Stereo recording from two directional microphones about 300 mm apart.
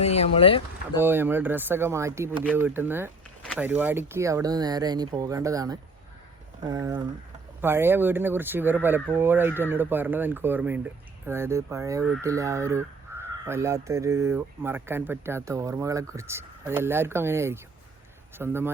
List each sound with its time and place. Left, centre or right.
0.0 s speech: centre
0.9 s speech: centre